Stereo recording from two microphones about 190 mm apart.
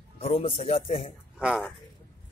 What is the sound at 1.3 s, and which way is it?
Speech, 5° right (ahead or behind).